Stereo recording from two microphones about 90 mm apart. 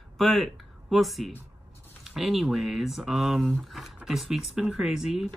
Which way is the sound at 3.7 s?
Centre (ahead or behind).